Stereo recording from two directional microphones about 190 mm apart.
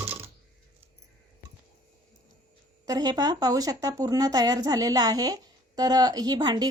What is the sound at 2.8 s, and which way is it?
Speech, 20° right (ahead or behind).